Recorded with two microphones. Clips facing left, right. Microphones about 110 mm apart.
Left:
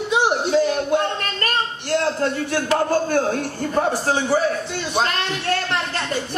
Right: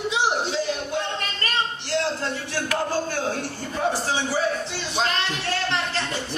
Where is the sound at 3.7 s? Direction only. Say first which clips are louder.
Left 4 dB; 55° left (ahead or behind).